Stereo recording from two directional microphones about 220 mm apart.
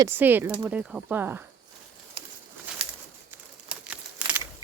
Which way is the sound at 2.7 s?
5° right (ahead or behind).